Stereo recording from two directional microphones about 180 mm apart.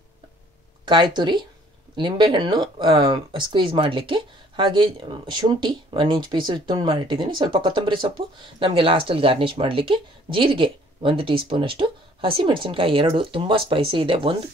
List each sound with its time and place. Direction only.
0.8 s speech: 25° right (ahead or behind)